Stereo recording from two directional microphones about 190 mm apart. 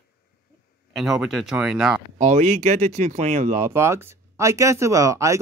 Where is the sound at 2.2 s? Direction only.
35° right (ahead or behind).